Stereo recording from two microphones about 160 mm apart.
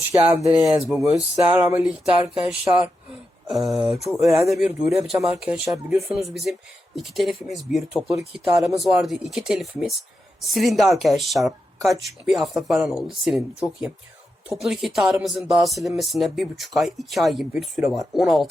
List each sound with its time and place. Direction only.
0.1 s speech: 20° right (ahead or behind)
0.8 s speech: centre (ahead or behind)